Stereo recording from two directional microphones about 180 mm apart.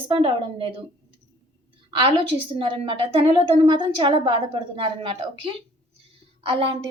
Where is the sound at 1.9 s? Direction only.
30° right (ahead or behind).